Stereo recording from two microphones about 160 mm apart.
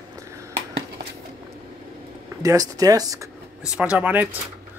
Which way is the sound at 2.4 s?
20° right (ahead or behind).